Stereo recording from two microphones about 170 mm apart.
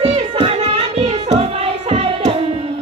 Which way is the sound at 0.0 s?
35° right (ahead or behind).